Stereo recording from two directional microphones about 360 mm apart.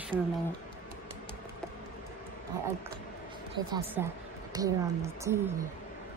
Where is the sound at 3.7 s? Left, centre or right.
Centre.